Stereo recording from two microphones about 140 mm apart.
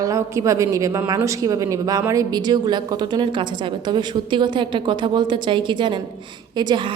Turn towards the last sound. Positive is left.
turn(degrees=-35)  # may be behind; listen again after turning